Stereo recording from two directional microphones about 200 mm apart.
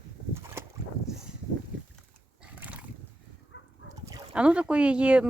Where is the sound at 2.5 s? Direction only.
5° right (ahead or behind).